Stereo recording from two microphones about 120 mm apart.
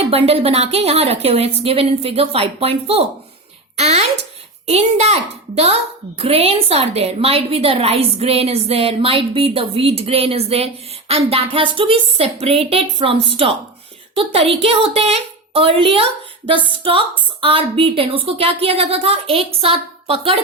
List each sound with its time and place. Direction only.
0.1 s a child's voice: 55° right (ahead or behind)